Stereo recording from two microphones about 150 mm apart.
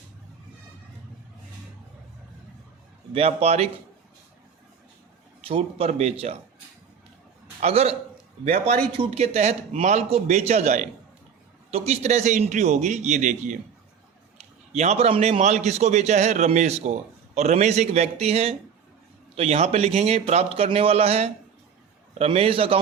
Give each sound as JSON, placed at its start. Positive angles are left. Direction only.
{"t": 3.1, "sound": "a man's voice", "side_deg": -40}
{"t": 5.5, "sound": "speech", "side_deg": -40}
{"t": 7.6, "sound": "a man's voice", "side_deg": -45}
{"t": 9.0, "sound": "a man's voice", "side_deg": -40}
{"t": 14.7, "sound": "a man's voice", "side_deg": -50}